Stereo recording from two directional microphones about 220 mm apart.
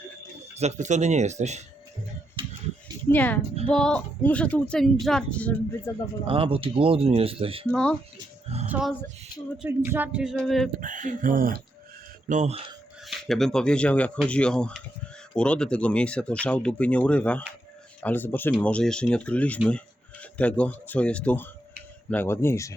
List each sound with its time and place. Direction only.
0.6 s speech: 30° right (ahead or behind)
2.4 s a sound: 25° right (ahead or behind)
3.1 s speech: 10° left (ahead or behind)
6.2 s speech: 25° right (ahead or behind)
7.7 s speech: 5° left (ahead or behind)
8.6 s music: 5° right (ahead or behind)
9.6 s speech: 10° right (ahead or behind)
10.8 s speech: 35° right (ahead or behind)
13.1 s speech: centre (ahead or behind)